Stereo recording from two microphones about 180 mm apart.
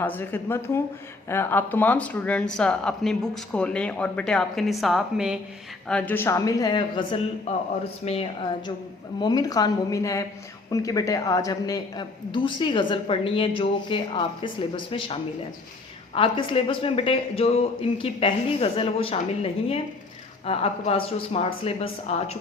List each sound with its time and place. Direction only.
0.0 s speech: 10° left (ahead or behind); by 5.4 s 5° right (ahead or behind)
5.9 s a woman's voice: 10° left (ahead or behind); by 8.7 s 35° left (ahead or behind)
9.2 s a woman's voice: 20° left (ahead or behind)